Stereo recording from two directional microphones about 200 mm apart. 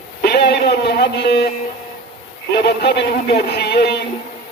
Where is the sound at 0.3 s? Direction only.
55° left (ahead or behind).